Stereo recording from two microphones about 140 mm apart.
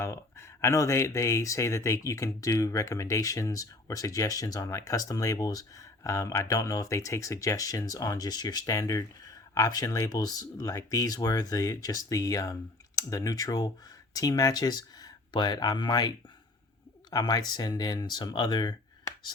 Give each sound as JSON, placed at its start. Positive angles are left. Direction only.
{"t": 0.0, "sound": "speech", "side_deg": 20}